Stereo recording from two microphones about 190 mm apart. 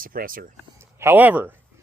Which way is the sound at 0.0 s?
50° right (ahead or behind).